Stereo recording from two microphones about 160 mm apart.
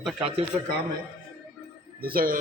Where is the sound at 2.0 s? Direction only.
65° right (ahead or behind).